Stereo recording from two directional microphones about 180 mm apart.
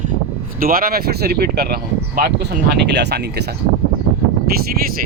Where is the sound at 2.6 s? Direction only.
70° right (ahead or behind).